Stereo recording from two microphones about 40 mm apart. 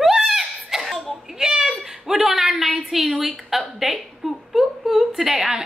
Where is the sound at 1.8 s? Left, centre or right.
Centre.